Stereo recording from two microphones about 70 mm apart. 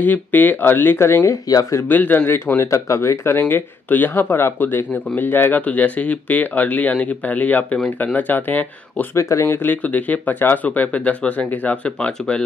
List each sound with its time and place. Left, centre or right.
0.0 s speech: left
1.3 s speech: left
1.9 s speech: left
2.7 s speech: left
3.3 s speech: left
9.1 s speech: left
9.5 s speech: left